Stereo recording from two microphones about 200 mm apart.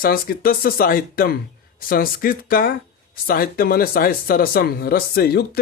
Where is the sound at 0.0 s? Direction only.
50° left (ahead or behind).